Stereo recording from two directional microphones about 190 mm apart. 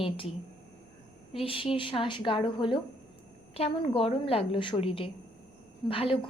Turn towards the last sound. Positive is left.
turn(degrees=30)  # may be behind; listen again after turning